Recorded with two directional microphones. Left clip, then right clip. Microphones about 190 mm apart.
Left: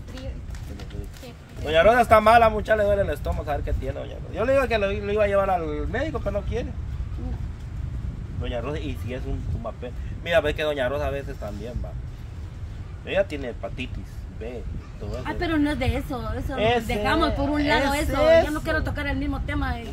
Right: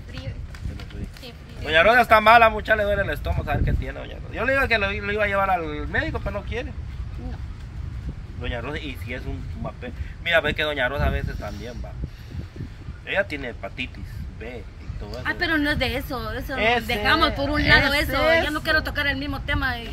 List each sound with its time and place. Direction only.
1.6 s speech: 15° left (ahead or behind)
8.4 s speech: 20° left (ahead or behind)
10.2 s speech: 25° left (ahead or behind)
13.0 s speech: 20° left (ahead or behind)
15.0 s speech: centre (ahead or behind)